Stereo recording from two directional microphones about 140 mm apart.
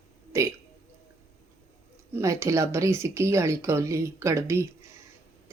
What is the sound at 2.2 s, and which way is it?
Speech, 20° right (ahead or behind).